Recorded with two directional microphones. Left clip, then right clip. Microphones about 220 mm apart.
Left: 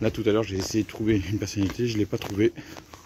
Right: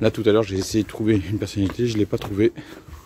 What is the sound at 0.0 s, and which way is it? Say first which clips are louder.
Speech: right 6 dB; 20° right (ahead or behind).